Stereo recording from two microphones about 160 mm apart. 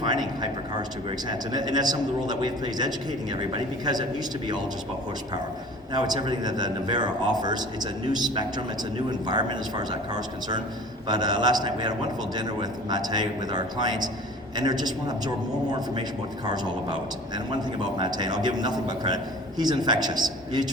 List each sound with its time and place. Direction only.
1.3 s a man's voice: 25° right (ahead or behind)
5.9 s a man's voice: 25° right (ahead or behind)
16.5 s a man's voice: 25° right (ahead or behind)